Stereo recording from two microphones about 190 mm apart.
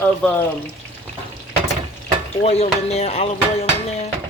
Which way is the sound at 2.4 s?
35° left (ahead or behind).